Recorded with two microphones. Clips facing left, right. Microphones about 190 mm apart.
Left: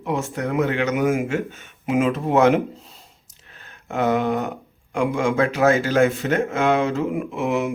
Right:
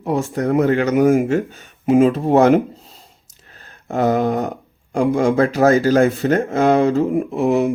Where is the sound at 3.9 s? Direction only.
35° right (ahead or behind).